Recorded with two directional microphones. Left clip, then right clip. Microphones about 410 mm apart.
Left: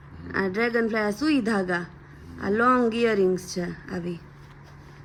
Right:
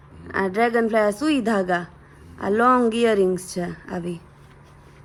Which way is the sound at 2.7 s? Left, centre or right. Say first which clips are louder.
Right 4 dB; centre.